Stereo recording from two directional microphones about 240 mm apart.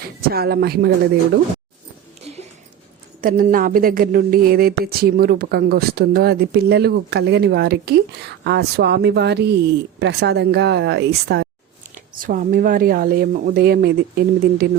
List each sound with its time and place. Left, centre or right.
0.0 s speech: right
3.2 s speech: right